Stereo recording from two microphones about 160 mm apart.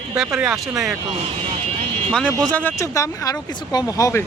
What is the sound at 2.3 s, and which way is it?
Speech, 5° left (ahead or behind).